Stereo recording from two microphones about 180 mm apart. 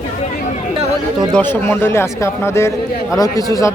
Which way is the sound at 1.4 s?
10° left (ahead or behind).